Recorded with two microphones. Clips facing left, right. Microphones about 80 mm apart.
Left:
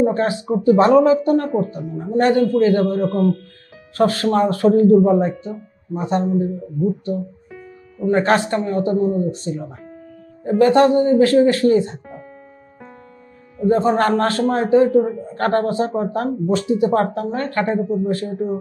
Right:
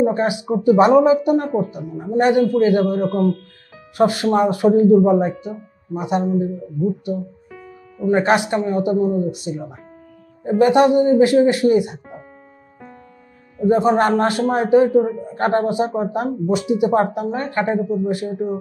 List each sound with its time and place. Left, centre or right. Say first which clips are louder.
0.0 s speech: even; centre
13.6 s speech: right 1 dB; centre